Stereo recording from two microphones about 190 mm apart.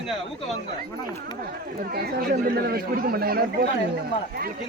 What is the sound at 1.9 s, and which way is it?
Speech, 50° right (ahead or behind).